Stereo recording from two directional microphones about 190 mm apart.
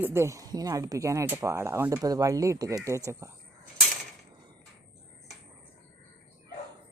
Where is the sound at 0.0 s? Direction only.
15° right (ahead or behind).